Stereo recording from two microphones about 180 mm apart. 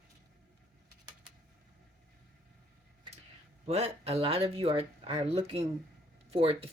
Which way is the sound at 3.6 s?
35° right (ahead or behind).